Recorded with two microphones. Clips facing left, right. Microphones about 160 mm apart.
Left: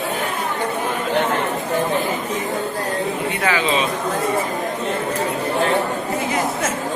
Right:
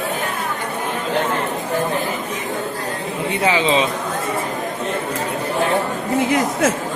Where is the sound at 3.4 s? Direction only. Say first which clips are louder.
Right 3 dB; 20° right (ahead or behind).